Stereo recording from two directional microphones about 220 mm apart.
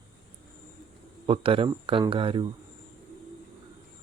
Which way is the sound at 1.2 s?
25° right (ahead or behind).